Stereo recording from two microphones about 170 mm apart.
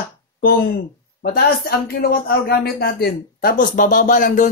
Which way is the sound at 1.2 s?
65° left (ahead or behind).